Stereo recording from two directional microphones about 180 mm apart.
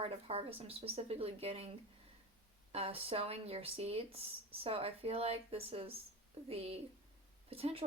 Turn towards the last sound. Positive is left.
turn(degrees=-35)  # may be behind; listen again after turning